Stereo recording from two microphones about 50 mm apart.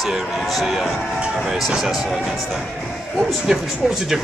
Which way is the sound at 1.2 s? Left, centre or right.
Centre.